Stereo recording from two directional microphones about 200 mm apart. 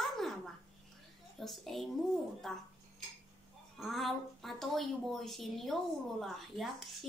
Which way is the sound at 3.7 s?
Centre (ahead or behind).